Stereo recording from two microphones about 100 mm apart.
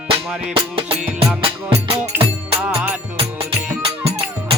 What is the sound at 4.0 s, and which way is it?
Music, 90° right.